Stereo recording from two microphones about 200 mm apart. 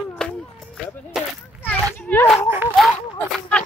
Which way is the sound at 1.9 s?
10° left (ahead or behind).